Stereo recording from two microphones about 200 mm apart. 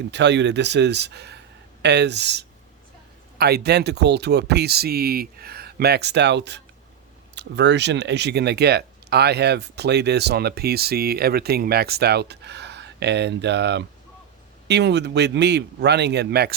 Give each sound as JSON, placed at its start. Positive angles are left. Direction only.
{"t": 0.1, "sound": "speech", "side_deg": -60}